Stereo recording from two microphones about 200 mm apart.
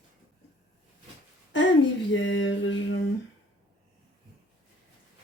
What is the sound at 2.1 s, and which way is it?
Mantra, 65° left (ahead or behind).